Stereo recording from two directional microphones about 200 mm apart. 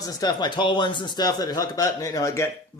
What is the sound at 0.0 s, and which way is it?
Speech, 20° left (ahead or behind).